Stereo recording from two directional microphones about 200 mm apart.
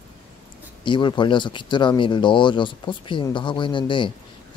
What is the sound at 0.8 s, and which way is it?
Speech, 25° left (ahead or behind).